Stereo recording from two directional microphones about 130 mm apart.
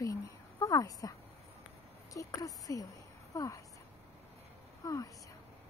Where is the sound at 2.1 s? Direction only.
25° left (ahead or behind).